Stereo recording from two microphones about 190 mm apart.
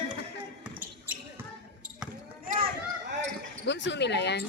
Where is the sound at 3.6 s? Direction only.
70° left (ahead or behind).